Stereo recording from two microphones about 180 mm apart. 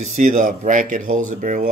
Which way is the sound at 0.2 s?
45° right (ahead or behind).